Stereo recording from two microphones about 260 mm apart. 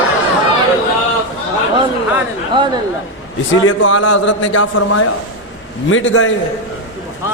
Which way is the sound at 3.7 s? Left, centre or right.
Left.